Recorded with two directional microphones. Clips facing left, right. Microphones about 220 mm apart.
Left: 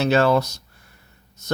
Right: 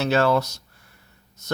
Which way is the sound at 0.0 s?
20° left (ahead or behind).